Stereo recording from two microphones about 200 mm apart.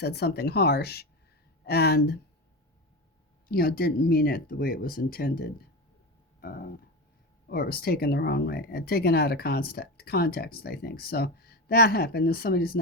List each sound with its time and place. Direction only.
0.0 s speech: 55° left (ahead or behind)
3.5 s speech: 50° left (ahead or behind)